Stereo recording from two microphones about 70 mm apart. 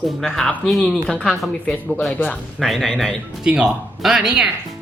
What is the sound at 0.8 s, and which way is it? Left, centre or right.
Speech, centre.